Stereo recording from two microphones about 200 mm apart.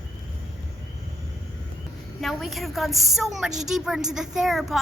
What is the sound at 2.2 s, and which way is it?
A woman's voice, centre (ahead or behind).